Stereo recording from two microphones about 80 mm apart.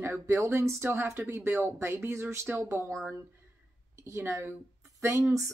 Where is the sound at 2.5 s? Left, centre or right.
Centre.